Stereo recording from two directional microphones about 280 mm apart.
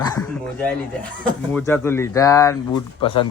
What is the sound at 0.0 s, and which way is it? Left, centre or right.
Bow-wow, centre.